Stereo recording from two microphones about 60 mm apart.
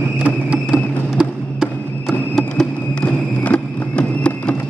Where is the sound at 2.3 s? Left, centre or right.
Centre.